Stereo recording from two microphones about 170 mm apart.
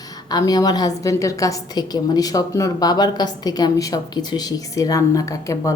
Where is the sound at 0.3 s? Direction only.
25° left (ahead or behind).